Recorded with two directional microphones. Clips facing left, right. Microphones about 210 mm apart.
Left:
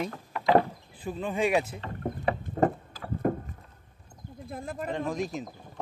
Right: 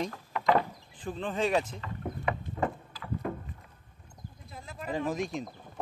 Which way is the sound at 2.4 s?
45° left (ahead or behind).